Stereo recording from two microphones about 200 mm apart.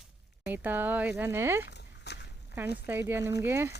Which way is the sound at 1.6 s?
55° left (ahead or behind).